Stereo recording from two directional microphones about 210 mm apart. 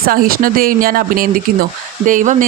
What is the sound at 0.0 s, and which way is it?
Speech, 45° right (ahead or behind).